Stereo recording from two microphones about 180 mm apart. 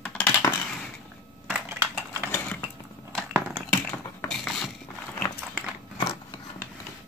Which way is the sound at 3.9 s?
5° left (ahead or behind).